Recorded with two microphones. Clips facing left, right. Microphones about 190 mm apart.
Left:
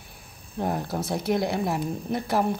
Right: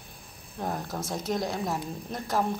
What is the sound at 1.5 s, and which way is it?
Speech, 10° left (ahead or behind).